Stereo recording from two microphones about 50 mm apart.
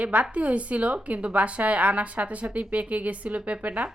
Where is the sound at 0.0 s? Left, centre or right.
Right.